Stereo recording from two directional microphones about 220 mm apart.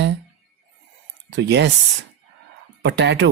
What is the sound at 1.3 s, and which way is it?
Speech, 50° right (ahead or behind).